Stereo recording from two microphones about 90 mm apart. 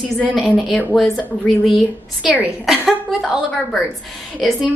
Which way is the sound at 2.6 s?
5° right (ahead or behind).